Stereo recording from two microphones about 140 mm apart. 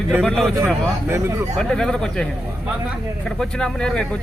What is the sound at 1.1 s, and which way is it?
Speech, 20° right (ahead or behind).